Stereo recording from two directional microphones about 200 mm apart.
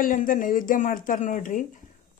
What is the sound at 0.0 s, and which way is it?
Speech, 45° left (ahead or behind).